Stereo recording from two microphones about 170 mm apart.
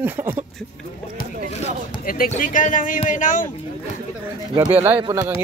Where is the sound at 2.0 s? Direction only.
55° left (ahead or behind).